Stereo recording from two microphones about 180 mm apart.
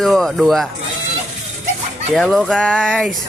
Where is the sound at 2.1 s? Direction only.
Centre (ahead or behind).